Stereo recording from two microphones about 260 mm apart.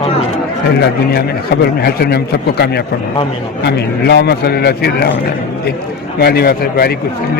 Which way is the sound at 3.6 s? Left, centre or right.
Left.